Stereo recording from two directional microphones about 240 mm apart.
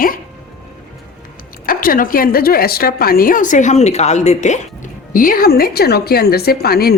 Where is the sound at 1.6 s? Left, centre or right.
Left.